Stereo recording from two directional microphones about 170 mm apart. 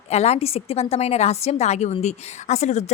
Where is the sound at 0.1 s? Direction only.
40° left (ahead or behind).